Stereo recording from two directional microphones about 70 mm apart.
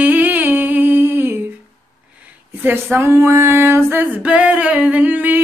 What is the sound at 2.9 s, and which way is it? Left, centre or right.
Female singing, right.